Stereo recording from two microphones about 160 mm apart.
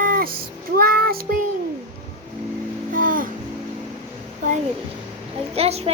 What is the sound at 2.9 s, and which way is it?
Music, 60° right (ahead or behind).